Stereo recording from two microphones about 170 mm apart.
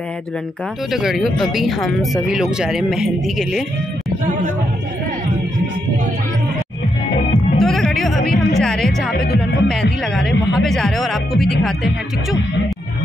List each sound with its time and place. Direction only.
0.9 s speech: centre (ahead or behind)
7.5 s music: 5° left (ahead or behind)
8.5 s speech: centre (ahead or behind)
9.1 s speech: 65° left (ahead or behind)
10.1 s speech: centre (ahead or behind)